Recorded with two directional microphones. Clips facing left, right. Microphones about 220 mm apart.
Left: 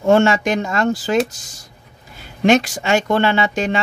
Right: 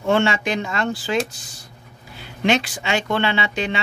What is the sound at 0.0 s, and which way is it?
Speech, 45° left (ahead or behind).